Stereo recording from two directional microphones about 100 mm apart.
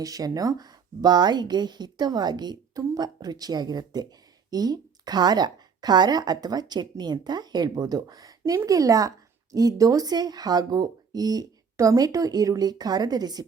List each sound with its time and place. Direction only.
0.0 s a woman's voice: 40° right (ahead or behind)